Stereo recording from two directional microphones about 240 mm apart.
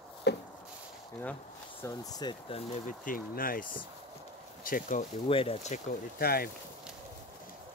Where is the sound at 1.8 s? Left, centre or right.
Centre.